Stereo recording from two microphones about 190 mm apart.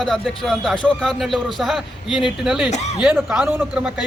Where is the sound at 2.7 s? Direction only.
35° left (ahead or behind).